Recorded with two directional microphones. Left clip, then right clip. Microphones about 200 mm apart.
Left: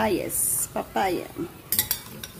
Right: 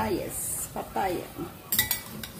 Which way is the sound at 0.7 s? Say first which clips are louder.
Left 5 dB; 50° left (ahead or behind).